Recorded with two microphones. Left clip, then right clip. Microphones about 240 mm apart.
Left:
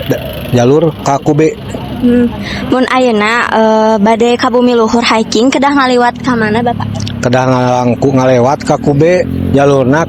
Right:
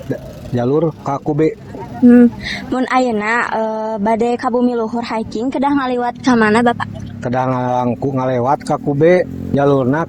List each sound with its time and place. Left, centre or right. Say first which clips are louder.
0.5 s speech: left 7 dB; left
2.7 s speech: left 6 dB; left
6.4 s speech: left 1 dB; centre
7.3 s speech: left 7 dB; left